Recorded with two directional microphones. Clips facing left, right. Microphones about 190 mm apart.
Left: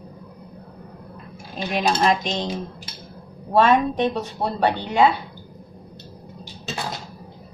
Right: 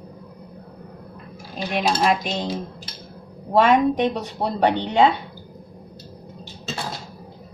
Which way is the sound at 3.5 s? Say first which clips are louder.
Right 1 dB; 10° right (ahead or behind).